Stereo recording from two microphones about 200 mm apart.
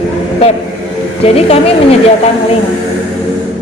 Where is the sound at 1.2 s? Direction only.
30° left (ahead or behind).